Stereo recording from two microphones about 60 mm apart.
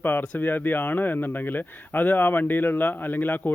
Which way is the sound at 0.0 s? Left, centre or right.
Left.